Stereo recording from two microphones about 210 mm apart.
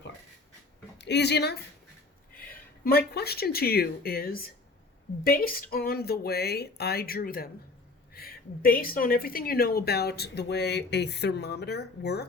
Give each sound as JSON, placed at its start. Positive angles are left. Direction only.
{"t": 0.9, "sound": "speech", "side_deg": 55}
{"t": 2.3, "sound": "a sound", "side_deg": 45}
{"t": 3.2, "sound": "a woman's voice", "side_deg": 50}